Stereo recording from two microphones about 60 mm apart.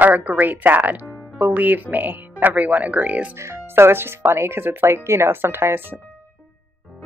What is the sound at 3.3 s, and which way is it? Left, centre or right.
Speech, right.